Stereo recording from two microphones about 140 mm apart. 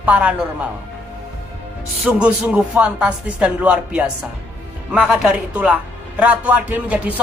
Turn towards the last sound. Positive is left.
turn(degrees=-10)  # may be behind; listen again after turning